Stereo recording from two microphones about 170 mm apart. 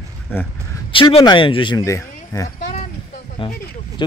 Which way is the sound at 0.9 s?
30° left (ahead or behind).